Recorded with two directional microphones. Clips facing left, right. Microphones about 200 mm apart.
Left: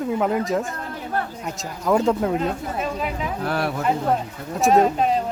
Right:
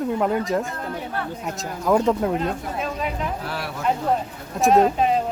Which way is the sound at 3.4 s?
50° left (ahead or behind).